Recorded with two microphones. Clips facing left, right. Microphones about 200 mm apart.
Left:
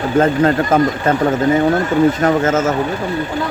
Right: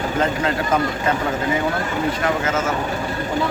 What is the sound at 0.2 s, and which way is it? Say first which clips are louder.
Speech: left 9 dB; 45° left (ahead or behind).